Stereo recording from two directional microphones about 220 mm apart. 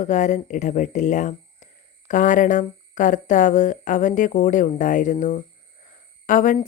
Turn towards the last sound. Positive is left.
turn(degrees=35)  # may be behind; listen again after turning